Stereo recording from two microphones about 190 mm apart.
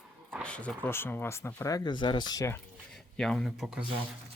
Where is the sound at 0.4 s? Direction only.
5° left (ahead or behind).